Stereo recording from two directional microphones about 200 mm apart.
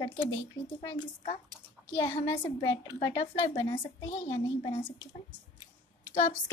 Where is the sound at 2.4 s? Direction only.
15° left (ahead or behind).